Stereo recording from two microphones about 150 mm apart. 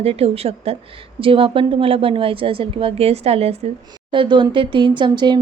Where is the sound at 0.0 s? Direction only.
40° right (ahead or behind).